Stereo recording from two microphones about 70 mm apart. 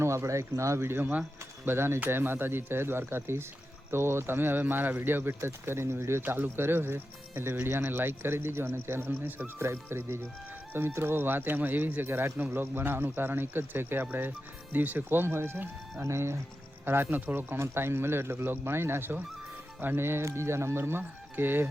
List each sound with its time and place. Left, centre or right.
0.0 s speech: right
16.0 s speech: right